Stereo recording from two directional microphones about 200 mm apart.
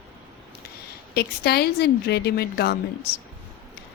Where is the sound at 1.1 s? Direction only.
55° left (ahead or behind).